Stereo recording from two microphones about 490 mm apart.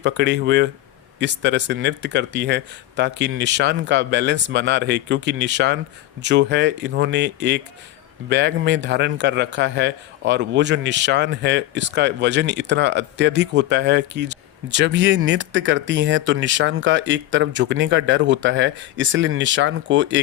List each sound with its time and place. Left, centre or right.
0.0 s a man's voice: right